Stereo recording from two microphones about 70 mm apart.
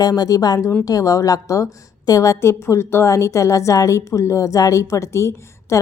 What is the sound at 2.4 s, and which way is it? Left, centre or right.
A woman's voice, left.